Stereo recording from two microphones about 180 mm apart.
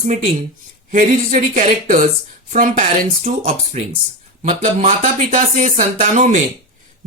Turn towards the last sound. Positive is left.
turn(degrees=-45)  # may be behind; listen again after turning